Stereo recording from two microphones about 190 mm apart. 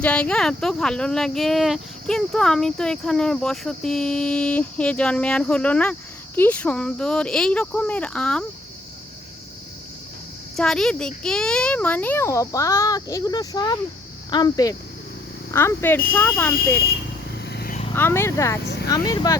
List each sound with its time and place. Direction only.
0.0 s speech: 5° left (ahead or behind)
10.6 s a child's voice: centre (ahead or behind)
17.4 s vehicle: 55° left (ahead or behind)
17.9 s a child's voice: 10° left (ahead or behind)